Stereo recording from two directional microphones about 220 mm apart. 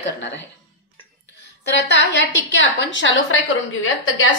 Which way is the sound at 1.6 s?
50° left (ahead or behind).